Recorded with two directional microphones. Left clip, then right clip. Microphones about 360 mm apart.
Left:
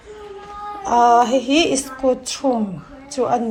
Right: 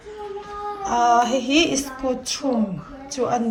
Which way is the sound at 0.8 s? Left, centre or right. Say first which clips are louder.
Left 4 dB; centre.